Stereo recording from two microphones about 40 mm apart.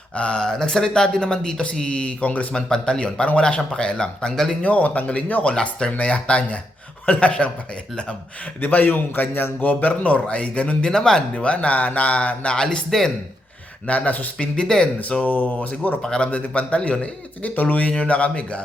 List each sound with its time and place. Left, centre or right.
0.2 s speech: left
2.5 s speech: centre
4.6 s speech: left
8.6 s a man's voice: left
9.6 s speech: left
10.8 s speech: centre
11.4 s speech: left
12.9 s speech: centre
13.8 s speech: left
14.3 s speech: left
15.2 s a man's voice: left
16.0 s speech: centre
16.2 s speech: left